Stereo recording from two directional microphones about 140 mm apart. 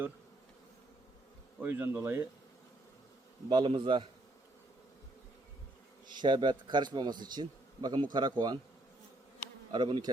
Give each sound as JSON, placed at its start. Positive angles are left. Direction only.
{"t": 1.6, "sound": "speech", "side_deg": -15}
{"t": 3.5, "sound": "a man's voice", "side_deg": -35}
{"t": 6.1, "sound": "a man's voice", "side_deg": -35}
{"t": 9.7, "sound": "a man's voice", "side_deg": -35}